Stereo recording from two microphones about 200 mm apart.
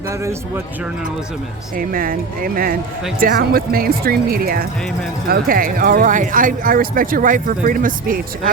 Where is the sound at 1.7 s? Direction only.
45° right (ahead or behind).